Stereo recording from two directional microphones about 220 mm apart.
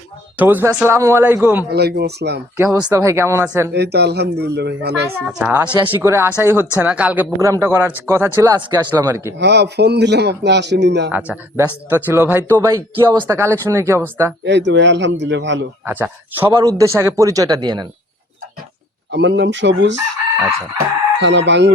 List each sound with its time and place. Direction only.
0.3 s speech: 10° right (ahead or behind)
1.7 s speech: 45° right (ahead or behind)
2.6 s speech: 5° right (ahead or behind)
3.7 s speech: 50° right (ahead or behind)
5.2 s speech: 5° right (ahead or behind)
9.4 s speech: 50° right (ahead or behind)
11.1 s speech: 5° right (ahead or behind)
14.4 s a man's voice: 55° right (ahead or behind)
15.9 s speech: 10° right (ahead or behind)
19.1 s speech: 55° right (ahead or behind)
21.2 s speech: 55° right (ahead or behind)